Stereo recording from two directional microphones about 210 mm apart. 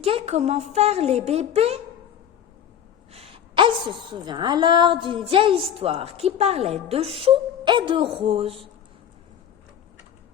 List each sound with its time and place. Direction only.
0.0 s a woman's voice: 30° right (ahead or behind)
3.1 s a woman's voice: 30° right (ahead or behind)